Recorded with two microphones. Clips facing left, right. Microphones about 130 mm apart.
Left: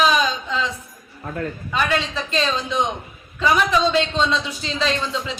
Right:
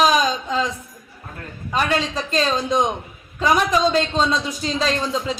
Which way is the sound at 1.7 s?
40° right (ahead or behind).